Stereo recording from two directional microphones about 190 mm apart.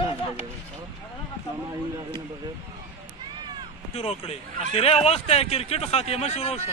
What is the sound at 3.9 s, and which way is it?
Speech, 30° left (ahead or behind).